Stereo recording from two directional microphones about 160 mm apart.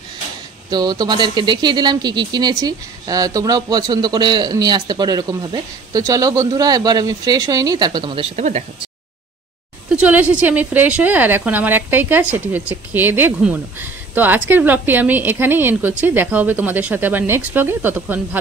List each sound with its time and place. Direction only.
0.7 s speech: 25° right (ahead or behind); by 8.6 s 45° right (ahead or behind)
9.9 s a woman's voice: 10° right (ahead or behind)